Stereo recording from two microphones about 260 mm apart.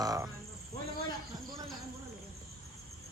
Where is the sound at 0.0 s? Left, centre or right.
Centre.